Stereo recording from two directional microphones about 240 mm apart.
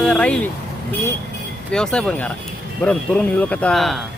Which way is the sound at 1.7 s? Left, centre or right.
Centre.